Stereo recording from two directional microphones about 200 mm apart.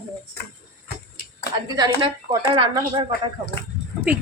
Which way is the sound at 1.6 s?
20° right (ahead or behind).